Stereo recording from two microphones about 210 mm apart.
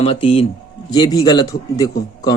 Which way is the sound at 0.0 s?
25° left (ahead or behind).